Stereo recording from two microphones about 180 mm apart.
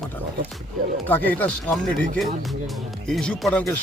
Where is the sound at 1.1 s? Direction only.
10° left (ahead or behind).